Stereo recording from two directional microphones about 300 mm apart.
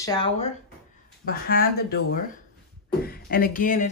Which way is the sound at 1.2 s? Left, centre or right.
Left.